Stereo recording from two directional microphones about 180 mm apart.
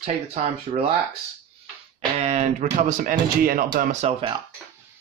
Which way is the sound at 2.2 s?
35° right (ahead or behind).